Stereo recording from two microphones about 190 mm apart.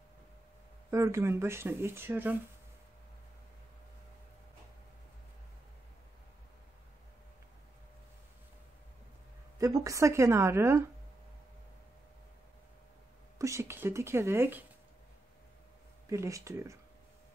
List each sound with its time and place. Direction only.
0.8 s speech: 15° right (ahead or behind)
9.6 s speech: 15° right (ahead or behind)
13.4 s speech: 15° right (ahead or behind)
16.1 s speech: 15° right (ahead or behind)